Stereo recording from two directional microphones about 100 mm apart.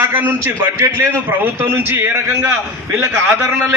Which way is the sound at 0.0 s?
20° right (ahead or behind).